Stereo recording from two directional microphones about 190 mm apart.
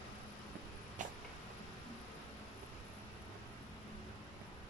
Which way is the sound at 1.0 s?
40° right (ahead or behind).